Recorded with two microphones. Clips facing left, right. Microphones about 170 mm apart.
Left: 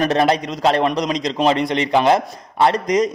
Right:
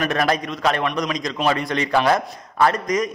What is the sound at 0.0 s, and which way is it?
A man's voice, 30° left (ahead or behind).